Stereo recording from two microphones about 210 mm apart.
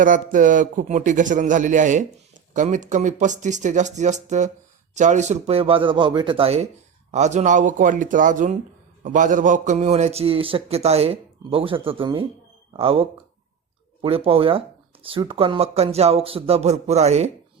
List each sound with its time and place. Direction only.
0.0 s a man's voice: 40° right (ahead or behind)